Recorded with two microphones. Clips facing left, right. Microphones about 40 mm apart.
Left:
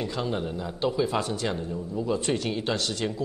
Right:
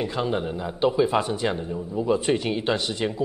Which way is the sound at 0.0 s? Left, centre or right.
Centre.